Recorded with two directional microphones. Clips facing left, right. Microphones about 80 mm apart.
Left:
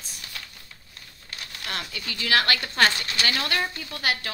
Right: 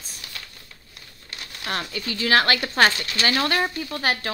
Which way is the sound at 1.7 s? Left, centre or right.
Right.